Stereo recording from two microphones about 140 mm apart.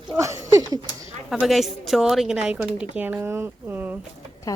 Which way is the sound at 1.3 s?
Centre (ahead or behind).